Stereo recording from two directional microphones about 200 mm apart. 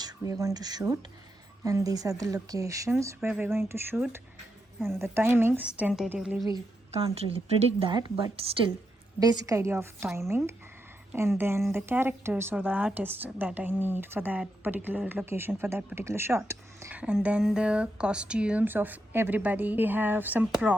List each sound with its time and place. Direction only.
0.0 s a woman's voice: 15° right (ahead or behind)
7.0 s speech: 30° right (ahead or behind); by 20.7 s 5° right (ahead or behind)